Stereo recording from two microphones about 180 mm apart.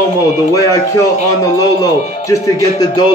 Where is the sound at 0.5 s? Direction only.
20° left (ahead or behind).